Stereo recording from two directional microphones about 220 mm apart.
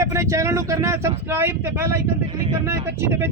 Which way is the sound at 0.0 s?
15° right (ahead or behind).